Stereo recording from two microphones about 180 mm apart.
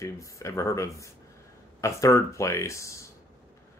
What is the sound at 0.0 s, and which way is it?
Speech, 15° left (ahead or behind).